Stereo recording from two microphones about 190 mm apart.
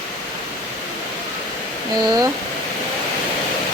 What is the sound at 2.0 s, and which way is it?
Speech, 20° right (ahead or behind).